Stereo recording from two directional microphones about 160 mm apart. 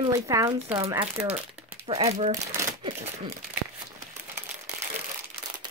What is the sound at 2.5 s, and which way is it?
Shuffling cards, 20° right (ahead or behind).